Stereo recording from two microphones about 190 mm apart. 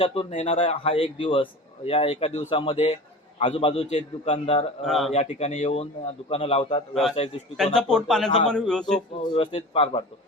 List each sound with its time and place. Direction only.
0.0 s a man's voice: 30° left (ahead or behind)
4.9 s speech: centre (ahead or behind)
5.1 s a man's voice: 35° left (ahead or behind)
6.9 s speech: centre (ahead or behind)
9.3 s a man's voice: 35° left (ahead or behind)